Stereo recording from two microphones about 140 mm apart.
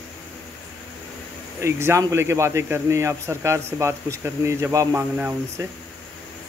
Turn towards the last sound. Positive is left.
turn(degrees=-15)  # may be behind; listen again after turning